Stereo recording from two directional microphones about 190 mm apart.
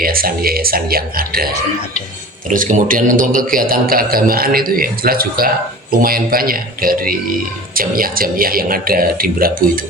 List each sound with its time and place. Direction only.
0.0 s a man's voice: 50° right (ahead or behind)
2.5 s a man's voice: 45° right (ahead or behind)